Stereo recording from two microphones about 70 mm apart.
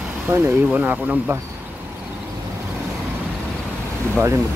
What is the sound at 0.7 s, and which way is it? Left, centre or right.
Speech, right.